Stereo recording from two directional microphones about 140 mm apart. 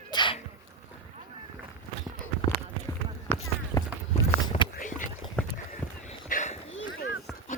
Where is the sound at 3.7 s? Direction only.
25° left (ahead or behind).